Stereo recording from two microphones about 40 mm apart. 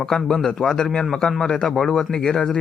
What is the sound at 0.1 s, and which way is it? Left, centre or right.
Speech, centre.